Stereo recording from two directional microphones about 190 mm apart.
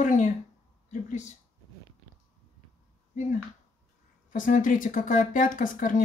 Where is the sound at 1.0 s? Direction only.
40° left (ahead or behind).